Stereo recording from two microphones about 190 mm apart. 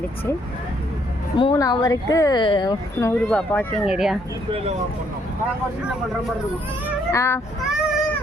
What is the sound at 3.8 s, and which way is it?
Speech, 5° right (ahead or behind).